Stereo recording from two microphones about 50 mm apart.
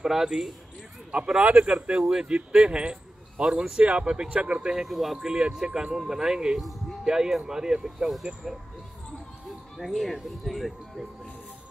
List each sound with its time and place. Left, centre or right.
0.0 s speech: centre; by 4.7 s right
4.7 s speech: centre
5.2 s speech: centre
9.8 s speech: centre